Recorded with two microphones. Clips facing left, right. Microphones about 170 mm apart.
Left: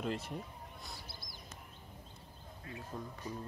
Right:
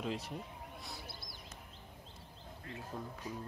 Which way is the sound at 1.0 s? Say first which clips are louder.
Right 2 dB; 60° right (ahead or behind).